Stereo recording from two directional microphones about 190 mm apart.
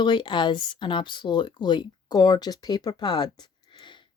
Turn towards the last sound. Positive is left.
turn(degrees=25)  # may be behind; listen again after turning